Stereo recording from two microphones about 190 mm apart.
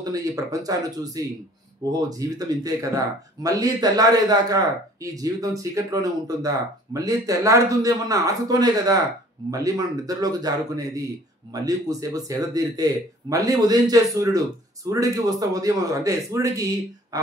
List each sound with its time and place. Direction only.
0.0 s a man's voice: 20° right (ahead or behind)